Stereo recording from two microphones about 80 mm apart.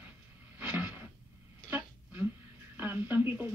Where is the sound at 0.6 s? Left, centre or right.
Centre.